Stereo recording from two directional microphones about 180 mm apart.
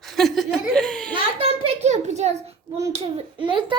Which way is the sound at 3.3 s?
25° right (ahead or behind).